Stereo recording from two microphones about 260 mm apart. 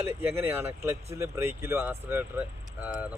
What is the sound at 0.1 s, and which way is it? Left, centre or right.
Speech, centre.